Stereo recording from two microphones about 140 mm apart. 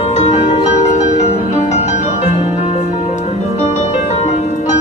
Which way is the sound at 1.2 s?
55° left (ahead or behind).